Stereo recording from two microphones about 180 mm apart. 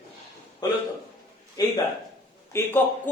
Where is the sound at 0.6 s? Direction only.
20° left (ahead or behind).